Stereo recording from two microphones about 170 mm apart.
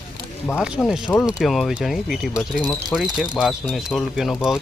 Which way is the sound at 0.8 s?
Centre (ahead or behind).